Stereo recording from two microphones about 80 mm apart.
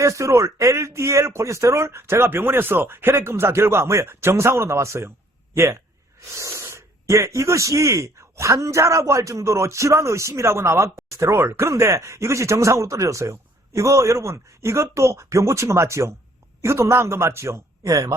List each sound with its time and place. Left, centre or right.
0.0 s speech: right